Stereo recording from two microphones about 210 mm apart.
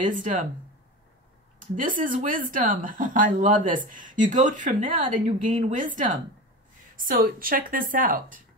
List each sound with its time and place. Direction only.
0.0 s speech: 40° right (ahead or behind)
1.8 s speech: 40° right (ahead or behind)